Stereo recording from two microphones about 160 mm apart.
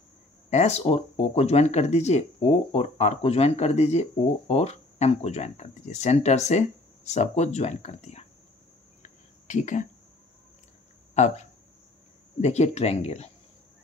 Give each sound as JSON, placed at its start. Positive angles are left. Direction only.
{"t": 0.5, "sound": "speech", "side_deg": 45}
{"t": 9.5, "sound": "speech", "side_deg": 50}
{"t": 11.1, "sound": "speech", "side_deg": 45}